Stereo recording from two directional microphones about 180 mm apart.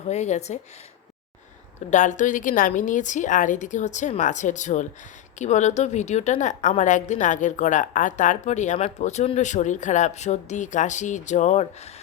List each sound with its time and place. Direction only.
0.1 s a woman's voice: 40° left (ahead or behind)
1.9 s a woman's voice: 45° left (ahead or behind)